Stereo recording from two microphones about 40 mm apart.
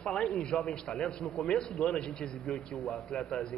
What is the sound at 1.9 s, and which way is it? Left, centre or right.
Speech, left.